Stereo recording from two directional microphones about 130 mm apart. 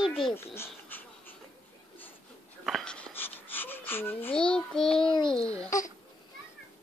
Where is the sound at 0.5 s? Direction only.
15° left (ahead or behind).